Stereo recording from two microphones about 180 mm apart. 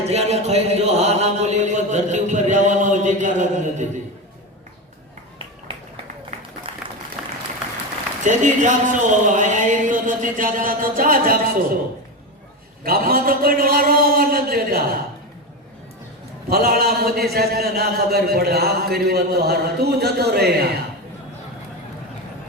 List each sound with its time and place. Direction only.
0.1 s mantra: 35° right (ahead or behind)
6.7 s applause: 35° right (ahead or behind)
7.2 s applause: 5° right (ahead or behind)
8.2 s speech: 45° right (ahead or behind)
12.8 s a man's voice: 55° right (ahead or behind)
16.5 s a man's voice: 55° right (ahead or behind)